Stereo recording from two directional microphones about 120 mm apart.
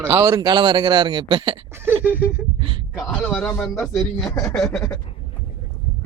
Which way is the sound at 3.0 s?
5° left (ahead or behind).